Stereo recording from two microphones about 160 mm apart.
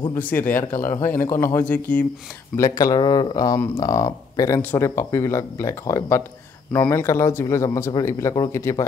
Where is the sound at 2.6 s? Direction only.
25° left (ahead or behind).